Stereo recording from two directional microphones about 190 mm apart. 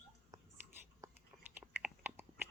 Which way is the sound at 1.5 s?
10° right (ahead or behind).